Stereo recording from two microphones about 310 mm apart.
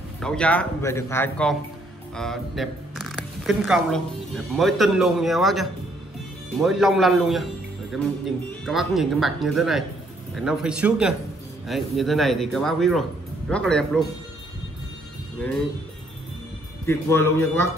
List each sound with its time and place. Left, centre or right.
0.2 s speech: centre
16.8 s a man's voice: centre